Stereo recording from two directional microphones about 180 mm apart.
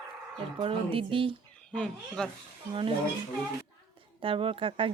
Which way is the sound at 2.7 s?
30° right (ahead or behind).